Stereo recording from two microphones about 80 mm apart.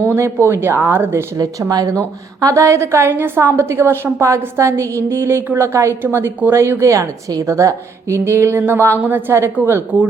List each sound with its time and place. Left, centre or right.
0.1 s a woman's voice: right
1.7 s a woman's voice: right